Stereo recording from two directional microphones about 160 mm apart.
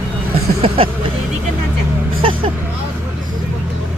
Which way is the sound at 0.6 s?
35° right (ahead or behind).